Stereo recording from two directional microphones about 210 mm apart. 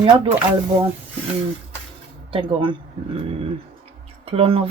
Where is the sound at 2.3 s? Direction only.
25° right (ahead or behind).